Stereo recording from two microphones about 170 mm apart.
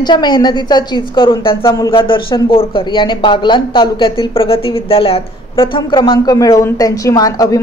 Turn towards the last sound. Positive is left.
turn(degrees=20)  # may be behind; listen again after turning